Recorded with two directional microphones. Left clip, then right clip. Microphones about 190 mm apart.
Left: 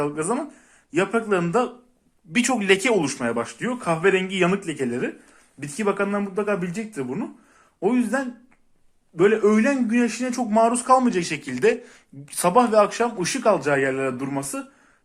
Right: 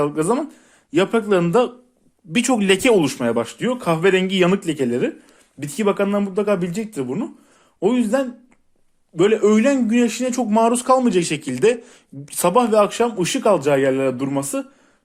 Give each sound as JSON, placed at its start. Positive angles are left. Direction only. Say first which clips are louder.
{"t": 0.0, "sound": "speech", "louder": "right 5 dB", "side_deg": -45}
{"t": 2.5, "sound": "speech", "louder": "right 2 dB", "side_deg": -70}
{"t": 3.2, "sound": "a man's voice", "louder": "right 4 dB", "side_deg": -50}
{"t": 10.9, "sound": "speech", "louder": "right 2 dB", "side_deg": -75}
{"t": 12.5, "sound": "a man's voice", "louder": "right 1 dB", "side_deg": -40}